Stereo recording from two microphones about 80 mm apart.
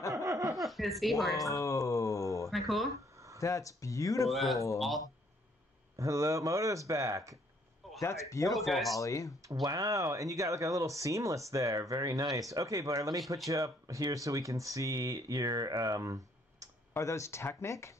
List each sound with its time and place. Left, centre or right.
0.1 s a sound: right
0.6 s a sound: centre
1.5 s a sound: left
2.5 s speech: centre
3.3 s speech: left
4.3 s speech: centre
5.9 s speech: right
8.0 s speech: left
8.5 s speech: centre
8.9 s speech: left
9.4 s speech: right
16.9 s speech: left